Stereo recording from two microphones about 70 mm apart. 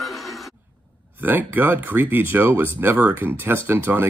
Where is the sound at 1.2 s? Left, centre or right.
Right.